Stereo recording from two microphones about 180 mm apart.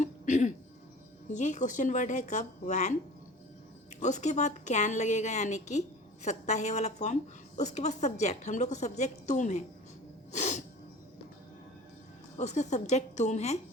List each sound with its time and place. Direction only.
0.0 s music: 40° left (ahead or behind)
1.3 s a woman's voice: 40° left (ahead or behind)
4.0 s a woman's voice: 40° left (ahead or behind)
10.3 s music: 40° left (ahead or behind)
12.4 s a woman's voice: 40° left (ahead or behind)